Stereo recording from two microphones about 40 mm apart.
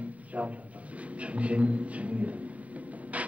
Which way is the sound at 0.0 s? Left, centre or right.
Right.